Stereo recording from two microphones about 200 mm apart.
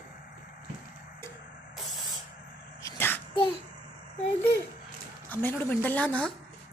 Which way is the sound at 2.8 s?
10° left (ahead or behind).